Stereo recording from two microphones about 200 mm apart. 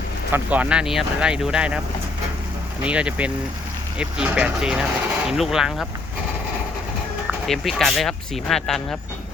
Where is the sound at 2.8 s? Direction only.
5° right (ahead or behind).